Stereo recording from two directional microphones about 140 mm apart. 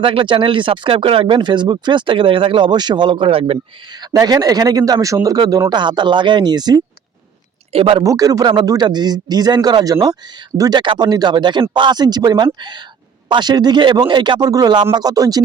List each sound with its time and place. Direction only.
0.0 s speech: 35° right (ahead or behind)
4.0 s speech: 25° right (ahead or behind)
7.7 s speech: 40° right (ahead or behind)
8.0 s speech: 25° right (ahead or behind)